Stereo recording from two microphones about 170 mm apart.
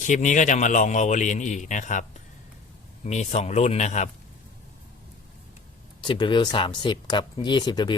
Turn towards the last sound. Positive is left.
turn(degrees=25)  # may be behind; listen again after turning